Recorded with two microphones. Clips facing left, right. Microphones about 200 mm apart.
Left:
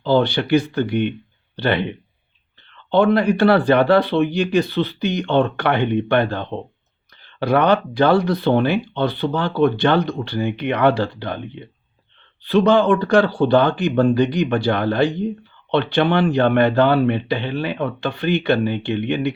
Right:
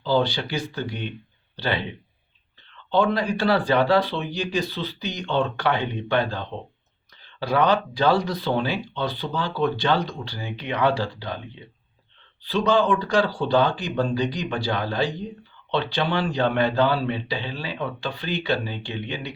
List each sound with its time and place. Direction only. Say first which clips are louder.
0.0 s speech: left 5 dB; 60° left (ahead or behind)
12.4 s speech: left 6 dB; 60° left (ahead or behind)